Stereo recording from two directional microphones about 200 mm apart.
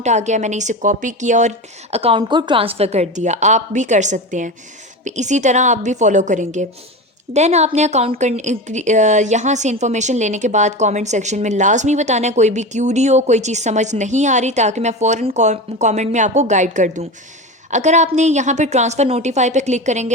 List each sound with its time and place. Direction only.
0.0 s a woman's voice: 35° right (ahead or behind)